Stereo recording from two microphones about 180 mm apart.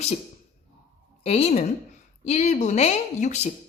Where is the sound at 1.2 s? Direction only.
35° left (ahead or behind).